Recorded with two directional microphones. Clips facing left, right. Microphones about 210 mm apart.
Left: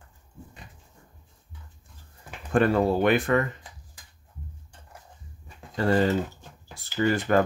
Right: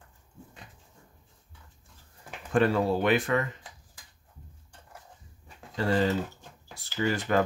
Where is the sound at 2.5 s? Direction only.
55° left (ahead or behind).